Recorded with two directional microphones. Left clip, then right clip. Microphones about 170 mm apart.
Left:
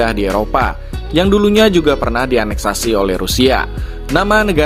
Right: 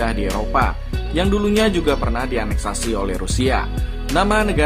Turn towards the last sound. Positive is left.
turn(degrees=40)  # may be behind; listen again after turning